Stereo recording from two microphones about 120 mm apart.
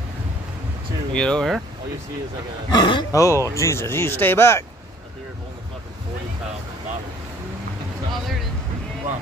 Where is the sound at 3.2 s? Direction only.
25° left (ahead or behind).